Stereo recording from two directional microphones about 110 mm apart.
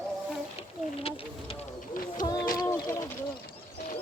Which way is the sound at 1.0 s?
55° left (ahead or behind).